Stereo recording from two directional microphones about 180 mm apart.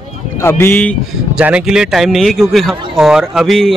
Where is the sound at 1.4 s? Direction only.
5° right (ahead or behind).